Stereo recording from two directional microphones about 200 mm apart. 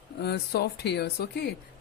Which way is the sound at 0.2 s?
55° left (ahead or behind).